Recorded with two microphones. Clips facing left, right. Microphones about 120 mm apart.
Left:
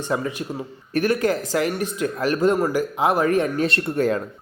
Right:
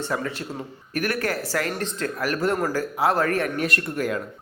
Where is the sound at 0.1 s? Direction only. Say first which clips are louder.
Left 3 dB; 15° left (ahead or behind).